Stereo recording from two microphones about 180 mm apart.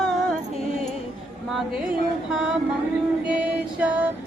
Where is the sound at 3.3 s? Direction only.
10° right (ahead or behind).